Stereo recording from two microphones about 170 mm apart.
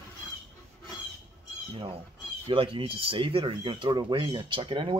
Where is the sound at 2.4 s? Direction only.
30° right (ahead or behind).